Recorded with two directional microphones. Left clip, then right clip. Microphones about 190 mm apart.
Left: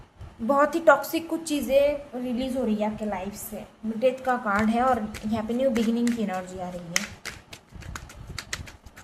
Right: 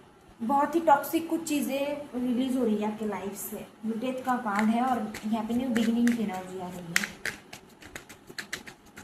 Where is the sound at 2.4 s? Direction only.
35° left (ahead or behind).